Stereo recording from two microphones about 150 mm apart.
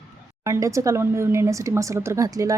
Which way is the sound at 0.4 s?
20° right (ahead or behind).